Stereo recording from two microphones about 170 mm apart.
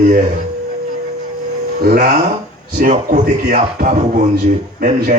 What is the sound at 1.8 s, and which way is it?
A man's voice, 50° right (ahead or behind).